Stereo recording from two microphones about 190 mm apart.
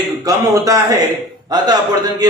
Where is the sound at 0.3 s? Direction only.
20° right (ahead or behind).